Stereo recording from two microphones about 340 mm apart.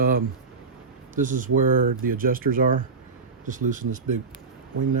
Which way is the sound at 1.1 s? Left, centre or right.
Right.